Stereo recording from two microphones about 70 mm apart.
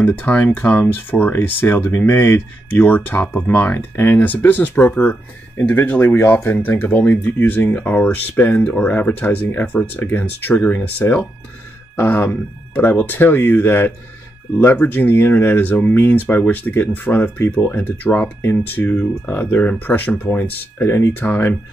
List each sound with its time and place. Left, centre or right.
0.0 s speech: left